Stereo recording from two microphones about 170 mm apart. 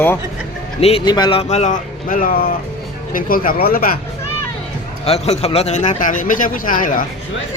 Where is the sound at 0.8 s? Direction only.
35° left (ahead or behind).